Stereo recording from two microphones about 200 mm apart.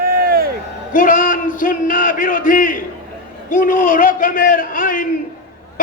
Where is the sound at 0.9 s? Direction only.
40° left (ahead or behind).